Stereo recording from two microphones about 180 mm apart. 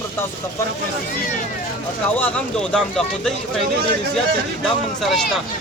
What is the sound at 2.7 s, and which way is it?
Speech, 5° left (ahead or behind).